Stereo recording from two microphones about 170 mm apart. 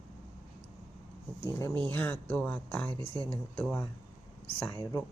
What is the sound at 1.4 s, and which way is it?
Speech, 15° left (ahead or behind).